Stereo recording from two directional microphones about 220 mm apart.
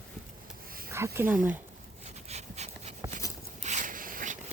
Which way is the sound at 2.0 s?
30° right (ahead or behind).